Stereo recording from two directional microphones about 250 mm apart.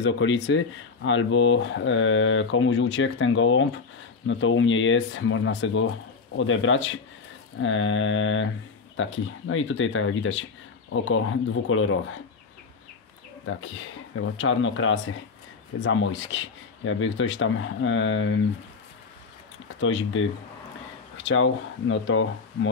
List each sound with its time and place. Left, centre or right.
0.0 s speech: left
13.5 s speech: left
19.8 s speech: left
21.3 s speech: left